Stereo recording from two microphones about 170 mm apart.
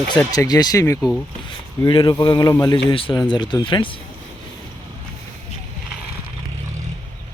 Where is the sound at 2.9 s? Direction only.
30° left (ahead or behind).